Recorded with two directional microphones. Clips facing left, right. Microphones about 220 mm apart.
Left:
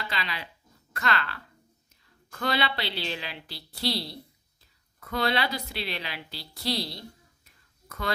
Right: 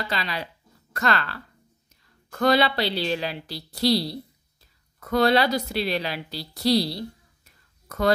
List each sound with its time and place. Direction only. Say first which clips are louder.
0.1 s a woman's voice: right 5 dB; 40° right (ahead or behind)